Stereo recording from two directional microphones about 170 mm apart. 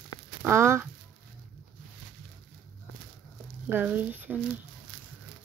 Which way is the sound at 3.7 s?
10° right (ahead or behind).